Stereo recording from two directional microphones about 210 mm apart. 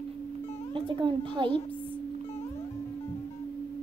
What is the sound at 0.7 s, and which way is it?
Speech, 25° right (ahead or behind).